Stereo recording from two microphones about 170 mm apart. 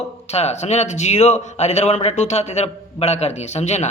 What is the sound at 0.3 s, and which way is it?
A man's voice, 40° left (ahead or behind).